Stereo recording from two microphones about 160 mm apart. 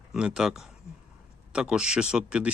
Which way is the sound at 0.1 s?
5° right (ahead or behind).